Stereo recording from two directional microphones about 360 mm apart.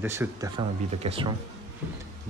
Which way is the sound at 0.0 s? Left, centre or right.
Centre.